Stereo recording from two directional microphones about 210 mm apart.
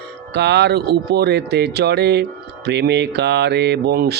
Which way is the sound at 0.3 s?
50° right (ahead or behind).